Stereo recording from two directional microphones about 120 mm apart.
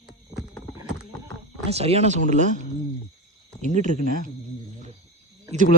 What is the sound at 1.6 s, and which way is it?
Speech, 60° right (ahead or behind).